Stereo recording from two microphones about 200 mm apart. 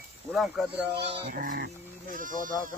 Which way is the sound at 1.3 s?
45° right (ahead or behind).